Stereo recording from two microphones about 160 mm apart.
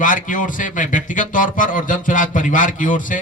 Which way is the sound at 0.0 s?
55° left (ahead or behind).